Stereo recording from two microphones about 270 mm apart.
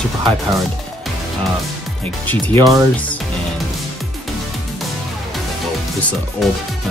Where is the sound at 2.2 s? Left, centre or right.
Centre.